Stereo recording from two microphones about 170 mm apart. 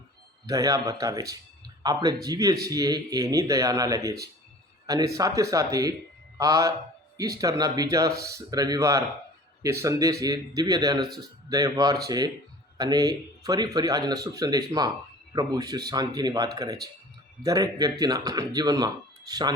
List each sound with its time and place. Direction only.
0.4 s a man's voice: 20° right (ahead or behind)